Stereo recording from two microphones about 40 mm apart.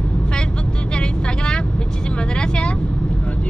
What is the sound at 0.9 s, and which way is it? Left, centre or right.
Vehicle, left.